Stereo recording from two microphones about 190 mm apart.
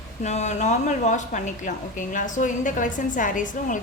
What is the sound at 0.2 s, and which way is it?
A woman's voice, 35° left (ahead or behind).